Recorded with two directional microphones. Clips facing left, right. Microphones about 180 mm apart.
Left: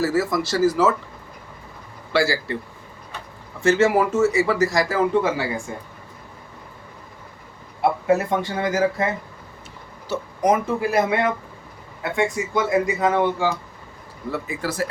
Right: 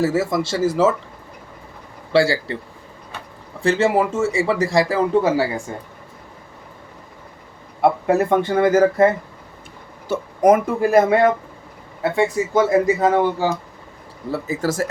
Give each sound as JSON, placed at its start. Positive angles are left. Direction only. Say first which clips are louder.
{"t": 0.0, "sound": "speech", "louder": "right 2 dB", "side_deg": -25}
{"t": 2.1, "sound": "speech", "louder": "right 4 dB", "side_deg": -30}
{"t": 3.6, "sound": "speech", "louder": "even", "side_deg": -30}
{"t": 7.8, "sound": "speech", "louder": "right 3 dB", "side_deg": -55}
{"t": 10.1, "sound": "speech", "louder": "right 5 dB", "side_deg": -50}
{"t": 14.3, "sound": "speech", "louder": "right 5 dB", "side_deg": -35}